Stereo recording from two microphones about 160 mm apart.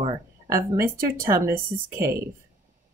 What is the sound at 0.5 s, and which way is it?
Speech, 15° right (ahead or behind).